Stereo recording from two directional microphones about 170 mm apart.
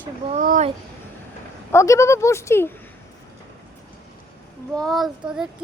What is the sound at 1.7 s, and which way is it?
Speech, 15° left (ahead or behind).